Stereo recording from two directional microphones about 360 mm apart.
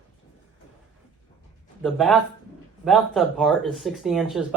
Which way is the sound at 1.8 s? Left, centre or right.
Centre.